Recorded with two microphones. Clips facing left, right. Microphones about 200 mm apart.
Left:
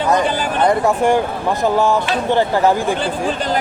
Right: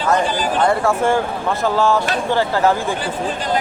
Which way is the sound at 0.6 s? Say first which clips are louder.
Left 3 dB; 15° left (ahead or behind).